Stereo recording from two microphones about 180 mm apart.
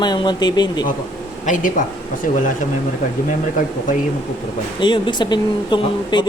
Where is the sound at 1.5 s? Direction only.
45° left (ahead or behind).